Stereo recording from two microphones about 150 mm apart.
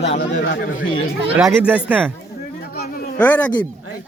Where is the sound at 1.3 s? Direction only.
10° right (ahead or behind).